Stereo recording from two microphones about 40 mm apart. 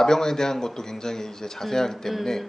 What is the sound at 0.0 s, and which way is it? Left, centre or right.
Speech, centre.